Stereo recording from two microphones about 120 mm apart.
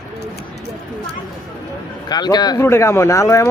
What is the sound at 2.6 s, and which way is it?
Speech, 20° left (ahead or behind).